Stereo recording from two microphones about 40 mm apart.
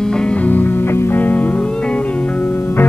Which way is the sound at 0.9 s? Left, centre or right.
Left.